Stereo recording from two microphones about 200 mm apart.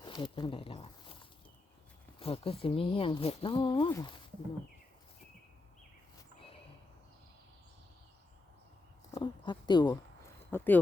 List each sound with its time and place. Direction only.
0.0 s speech: 25° left (ahead or behind)
9.1 s speech: 25° left (ahead or behind)
10.5 s speech: 10° left (ahead or behind)